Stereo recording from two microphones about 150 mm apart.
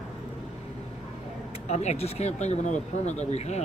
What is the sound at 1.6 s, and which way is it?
Speech, 45° left (ahead or behind).